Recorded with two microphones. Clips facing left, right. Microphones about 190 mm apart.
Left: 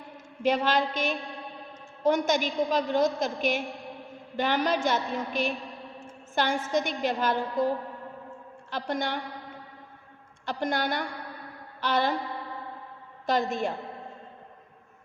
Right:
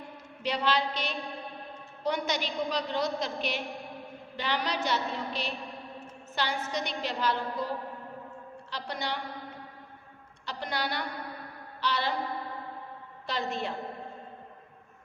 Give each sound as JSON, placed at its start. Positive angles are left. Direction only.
{"t": 0.4, "sound": "a woman's voice", "side_deg": 50}
{"t": 8.7, "sound": "a woman's voice", "side_deg": 50}
{"t": 10.4, "sound": "a woman's voice", "side_deg": 50}
{"t": 13.2, "sound": "a woman's voice", "side_deg": 45}